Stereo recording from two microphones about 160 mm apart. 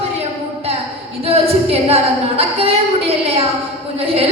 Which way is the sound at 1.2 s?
40° right (ahead or behind).